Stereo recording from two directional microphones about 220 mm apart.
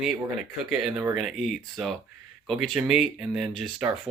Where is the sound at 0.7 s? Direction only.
5° right (ahead or behind).